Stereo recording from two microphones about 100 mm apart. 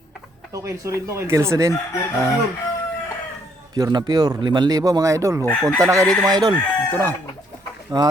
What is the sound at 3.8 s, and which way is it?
Speech, 40° right (ahead or behind).